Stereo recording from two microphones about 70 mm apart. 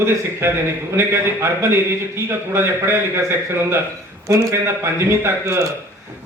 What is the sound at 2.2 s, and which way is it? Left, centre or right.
Speech, right.